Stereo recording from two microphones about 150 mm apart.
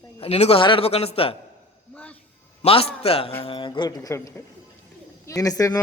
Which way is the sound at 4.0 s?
20° left (ahead or behind).